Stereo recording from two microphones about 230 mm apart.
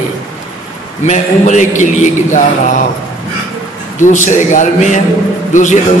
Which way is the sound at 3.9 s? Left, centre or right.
Left.